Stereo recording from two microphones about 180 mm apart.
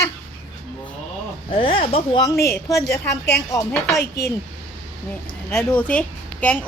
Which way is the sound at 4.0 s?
60° left (ahead or behind).